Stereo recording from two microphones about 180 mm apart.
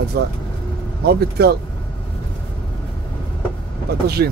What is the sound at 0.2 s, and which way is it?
Speech, 60° right (ahead or behind).